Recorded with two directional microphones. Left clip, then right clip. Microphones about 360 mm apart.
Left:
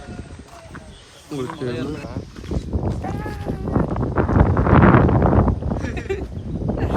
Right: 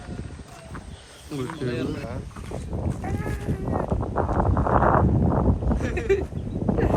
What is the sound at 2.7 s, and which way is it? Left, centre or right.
Boat, left.